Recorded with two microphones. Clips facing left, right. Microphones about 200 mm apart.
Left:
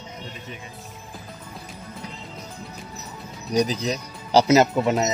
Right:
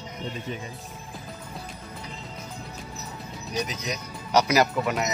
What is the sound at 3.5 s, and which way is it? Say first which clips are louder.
Speech: left 8 dB; 35° left (ahead or behind).